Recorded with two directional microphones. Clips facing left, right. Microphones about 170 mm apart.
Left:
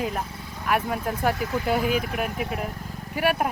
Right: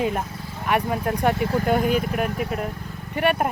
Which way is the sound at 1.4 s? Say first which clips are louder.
Right 4 dB; 35° right (ahead or behind).